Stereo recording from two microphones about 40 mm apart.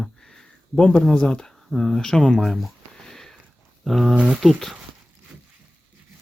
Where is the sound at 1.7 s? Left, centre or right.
Centre.